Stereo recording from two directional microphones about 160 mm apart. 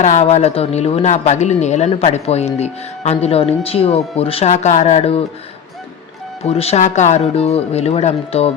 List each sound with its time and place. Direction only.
0.0 s speech: 45° left (ahead or behind)
6.4 s a man's voice: 40° left (ahead or behind)